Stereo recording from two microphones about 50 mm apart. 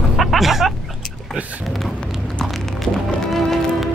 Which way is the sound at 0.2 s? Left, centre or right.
Centre.